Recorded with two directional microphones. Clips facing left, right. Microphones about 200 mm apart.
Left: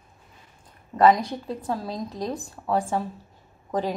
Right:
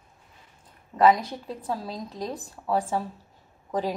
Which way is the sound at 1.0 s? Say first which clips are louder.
Left 2 dB; 5° right (ahead or behind).